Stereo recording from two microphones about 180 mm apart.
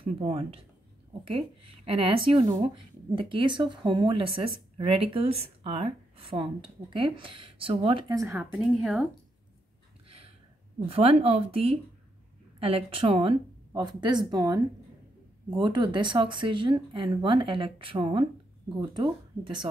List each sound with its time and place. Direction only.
0.0 s speech: 30° right (ahead or behind)
1.9 s speech: 30° right (ahead or behind); by 9.1 s centre (ahead or behind)
10.0 s a sound: 35° right (ahead or behind)
10.9 s speech: 35° right (ahead or behind)